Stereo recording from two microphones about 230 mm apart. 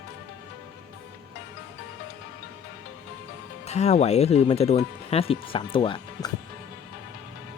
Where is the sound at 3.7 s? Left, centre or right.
Left.